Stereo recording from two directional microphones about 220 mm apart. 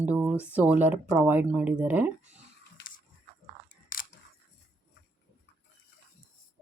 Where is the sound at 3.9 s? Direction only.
40° left (ahead or behind).